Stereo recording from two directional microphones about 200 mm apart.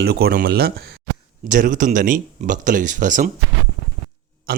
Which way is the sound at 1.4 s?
40° right (ahead or behind).